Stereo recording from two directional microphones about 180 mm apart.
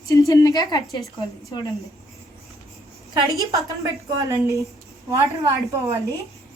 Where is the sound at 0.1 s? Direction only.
20° left (ahead or behind).